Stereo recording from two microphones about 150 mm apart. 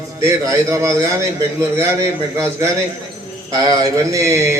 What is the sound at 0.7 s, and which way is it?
A man's voice, 20° right (ahead or behind).